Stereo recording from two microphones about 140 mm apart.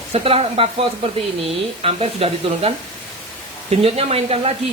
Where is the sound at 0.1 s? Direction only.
45° right (ahead or behind).